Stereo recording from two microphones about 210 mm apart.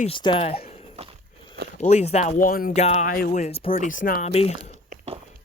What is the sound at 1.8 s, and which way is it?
Speech, 30° left (ahead or behind).